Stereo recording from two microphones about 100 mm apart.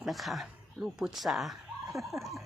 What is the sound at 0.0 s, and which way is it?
Speech, centre (ahead or behind).